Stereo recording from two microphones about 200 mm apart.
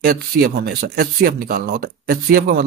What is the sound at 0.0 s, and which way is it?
Speech, 50° right (ahead or behind).